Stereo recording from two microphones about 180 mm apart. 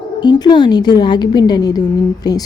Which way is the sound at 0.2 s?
25° left (ahead or behind).